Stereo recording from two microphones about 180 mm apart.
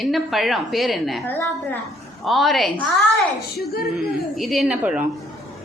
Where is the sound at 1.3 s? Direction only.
10° left (ahead or behind).